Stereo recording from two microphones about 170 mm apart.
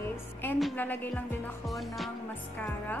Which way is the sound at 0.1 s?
10° left (ahead or behind).